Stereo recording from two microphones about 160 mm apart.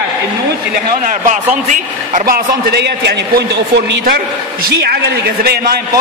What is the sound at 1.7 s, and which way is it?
A man's voice, 60° right (ahead or behind).